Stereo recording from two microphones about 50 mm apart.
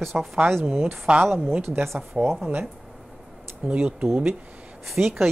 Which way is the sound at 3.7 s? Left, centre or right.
Right.